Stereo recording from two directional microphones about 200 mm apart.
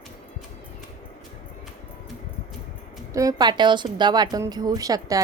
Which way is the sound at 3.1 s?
15° right (ahead or behind).